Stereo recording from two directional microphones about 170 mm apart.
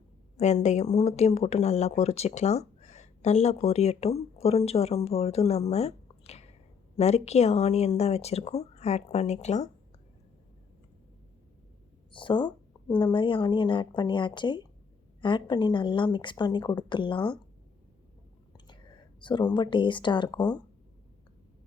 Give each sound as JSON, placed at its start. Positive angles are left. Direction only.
{"t": 0.3, "sound": "speech", "side_deg": 40}
{"t": 12.1, "sound": "speech", "side_deg": 30}
{"t": 18.5, "sound": "speech", "side_deg": 25}